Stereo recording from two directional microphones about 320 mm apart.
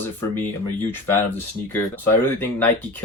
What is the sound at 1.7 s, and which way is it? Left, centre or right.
Speech, centre.